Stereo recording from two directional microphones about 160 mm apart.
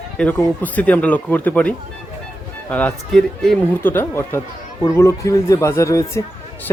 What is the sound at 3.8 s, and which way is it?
Speech, 15° left (ahead or behind).